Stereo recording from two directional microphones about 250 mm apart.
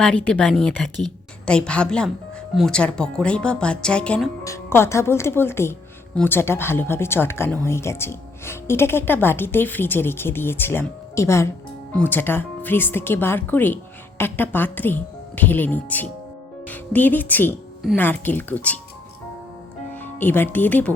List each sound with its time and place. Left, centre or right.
0.0 s speech: centre
20.0 s speech: centre